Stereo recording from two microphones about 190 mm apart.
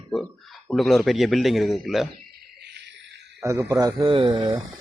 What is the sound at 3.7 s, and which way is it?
Speech, 20° right (ahead or behind).